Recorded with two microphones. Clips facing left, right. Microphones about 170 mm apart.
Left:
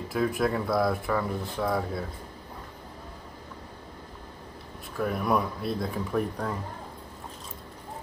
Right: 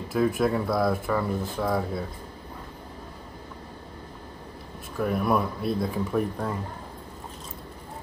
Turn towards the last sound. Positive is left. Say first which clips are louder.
# right 2 dB
turn(degrees=0)  # may be behind; listen again after turning